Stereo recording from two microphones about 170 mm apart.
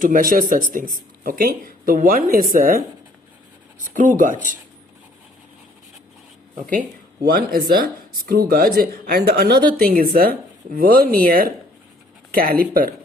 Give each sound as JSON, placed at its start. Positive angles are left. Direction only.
{"t": 0.0, "sound": "speech", "side_deg": -55}
{"t": 3.9, "sound": "speech", "side_deg": -50}
{"t": 7.3, "sound": "speech", "side_deg": -65}